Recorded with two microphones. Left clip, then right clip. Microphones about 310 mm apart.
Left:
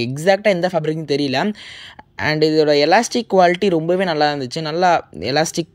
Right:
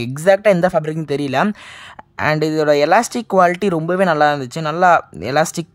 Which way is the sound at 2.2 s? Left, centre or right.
Right.